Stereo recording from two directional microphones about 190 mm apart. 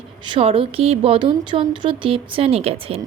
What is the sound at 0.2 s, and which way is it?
A woman's voice, 30° right (ahead or behind).